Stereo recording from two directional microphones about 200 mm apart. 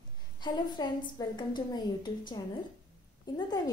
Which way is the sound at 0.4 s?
20° left (ahead or behind).